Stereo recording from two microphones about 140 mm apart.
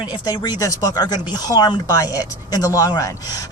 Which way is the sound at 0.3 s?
30° left (ahead or behind).